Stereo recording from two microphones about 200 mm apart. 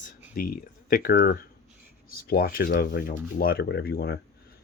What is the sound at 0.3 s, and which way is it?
Speech, 45° left (ahead or behind).